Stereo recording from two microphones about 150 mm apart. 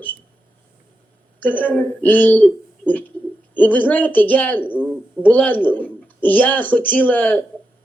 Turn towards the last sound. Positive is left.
turn(degrees=10)  # may be behind; listen again after turning